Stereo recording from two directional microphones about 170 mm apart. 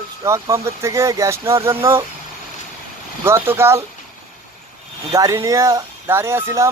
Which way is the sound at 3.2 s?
15° right (ahead or behind).